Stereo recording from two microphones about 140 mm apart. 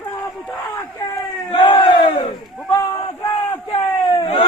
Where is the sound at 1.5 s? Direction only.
35° left (ahead or behind).